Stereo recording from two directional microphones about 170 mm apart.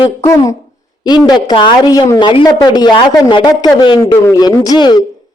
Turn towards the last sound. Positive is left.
turn(degrees=25)  # may be behind; listen again after turning